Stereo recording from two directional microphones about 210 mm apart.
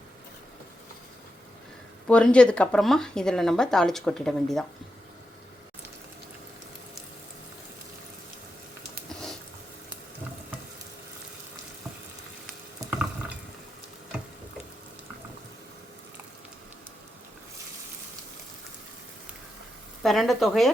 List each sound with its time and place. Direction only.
2.0 s speech: 5° left (ahead or behind)
20.0 s speech: centre (ahead or behind)